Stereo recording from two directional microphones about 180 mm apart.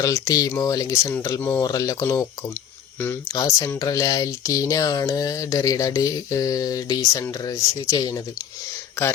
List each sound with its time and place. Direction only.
0.0 s speech: 20° left (ahead or behind)